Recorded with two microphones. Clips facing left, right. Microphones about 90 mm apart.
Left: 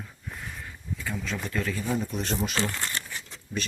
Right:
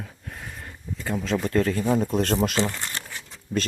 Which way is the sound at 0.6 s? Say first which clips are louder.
Right 5 dB; 55° right (ahead or behind).